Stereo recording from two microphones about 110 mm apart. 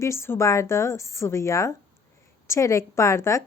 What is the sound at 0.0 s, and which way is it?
A woman's voice, 25° left (ahead or behind).